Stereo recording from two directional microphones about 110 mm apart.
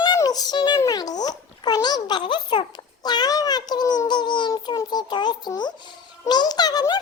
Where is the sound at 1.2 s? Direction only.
35° left (ahead or behind).